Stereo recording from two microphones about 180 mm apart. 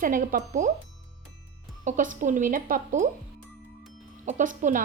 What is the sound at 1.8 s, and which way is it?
A woman's voice, 45° right (ahead or behind).